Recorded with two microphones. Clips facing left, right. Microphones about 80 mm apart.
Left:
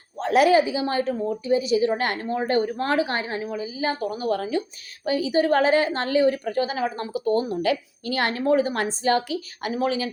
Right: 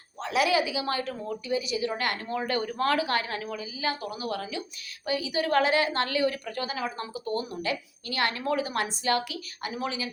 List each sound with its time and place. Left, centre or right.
0.2 s a woman's voice: left
8.1 s a woman's voice: left
9.6 s a woman's voice: left